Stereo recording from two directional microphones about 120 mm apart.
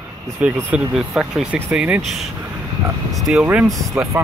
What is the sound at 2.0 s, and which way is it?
Speech, centre (ahead or behind).